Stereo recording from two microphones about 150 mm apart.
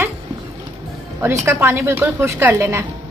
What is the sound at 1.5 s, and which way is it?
A woman's voice, 15° right (ahead or behind).